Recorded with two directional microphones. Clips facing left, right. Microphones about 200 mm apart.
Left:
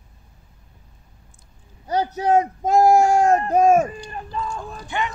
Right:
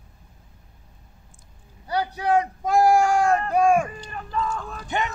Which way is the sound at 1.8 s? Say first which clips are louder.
Left 3 dB; 40° left (ahead or behind).